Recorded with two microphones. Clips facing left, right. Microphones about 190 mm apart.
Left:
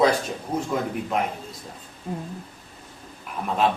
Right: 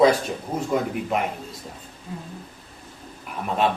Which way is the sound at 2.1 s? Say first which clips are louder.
Left 5 dB; 55° left (ahead or behind).